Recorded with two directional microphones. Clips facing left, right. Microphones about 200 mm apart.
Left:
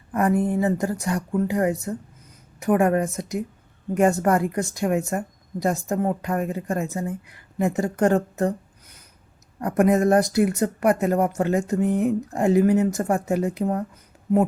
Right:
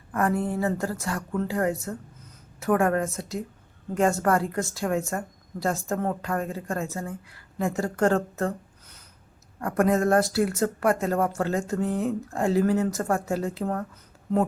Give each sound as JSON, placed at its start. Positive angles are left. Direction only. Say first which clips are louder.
{"t": 0.1, "sound": "speech", "louder": "left 4 dB", "side_deg": 15}